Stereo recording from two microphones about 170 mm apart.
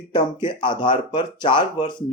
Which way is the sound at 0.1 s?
25° left (ahead or behind).